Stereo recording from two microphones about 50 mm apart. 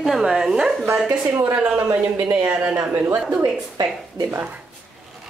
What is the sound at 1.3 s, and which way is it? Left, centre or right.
Speech, right.